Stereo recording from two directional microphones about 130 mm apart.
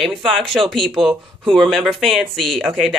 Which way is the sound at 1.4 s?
Centre (ahead or behind).